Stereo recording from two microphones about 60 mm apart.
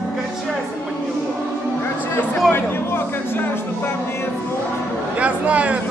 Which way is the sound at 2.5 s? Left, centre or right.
Left.